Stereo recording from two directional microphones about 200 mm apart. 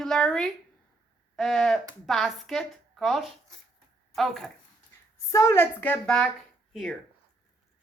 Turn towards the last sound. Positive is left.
turn(degrees=0)  # may be behind; listen again after turning